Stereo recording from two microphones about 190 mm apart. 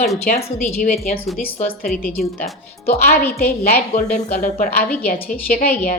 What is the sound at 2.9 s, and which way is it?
Speech, 55° left (ahead or behind).